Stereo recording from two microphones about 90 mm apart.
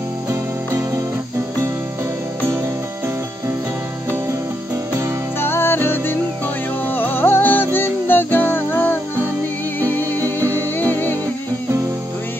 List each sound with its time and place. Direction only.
0.3 s music: 30° right (ahead or behind)
5.4 s music: 25° left (ahead or behind)